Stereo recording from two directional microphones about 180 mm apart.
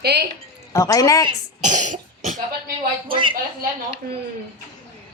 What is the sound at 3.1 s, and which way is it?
Speech, 30° right (ahead or behind).